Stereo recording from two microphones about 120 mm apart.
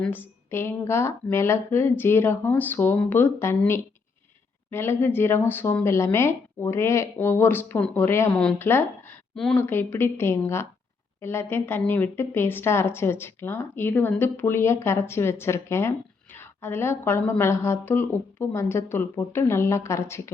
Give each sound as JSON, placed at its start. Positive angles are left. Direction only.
{"t": 0.0, "sound": "a woman's voice", "side_deg": 15}
{"t": 4.7, "sound": "a woman's voice", "side_deg": 20}
{"t": 9.3, "sound": "speech", "side_deg": 5}
{"t": 9.6, "sound": "a woman's voice", "side_deg": 15}